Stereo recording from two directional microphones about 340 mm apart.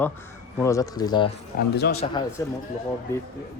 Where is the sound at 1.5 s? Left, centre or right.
Left.